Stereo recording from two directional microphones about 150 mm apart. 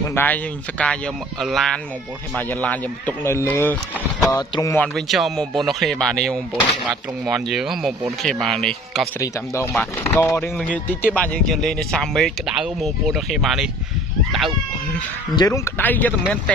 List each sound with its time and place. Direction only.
0.1 s speech: 10° left (ahead or behind)
4.4 s speech: 25° left (ahead or behind)
4.7 s speech: 5° left (ahead or behind)
9.2 s speech: 20° left (ahead or behind); by 13.7 s centre (ahead or behind)
15.3 s speech: 25° left (ahead or behind)